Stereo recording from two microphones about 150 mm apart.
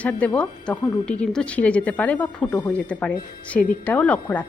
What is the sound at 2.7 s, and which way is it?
A woman's voice, 10° left (ahead or behind).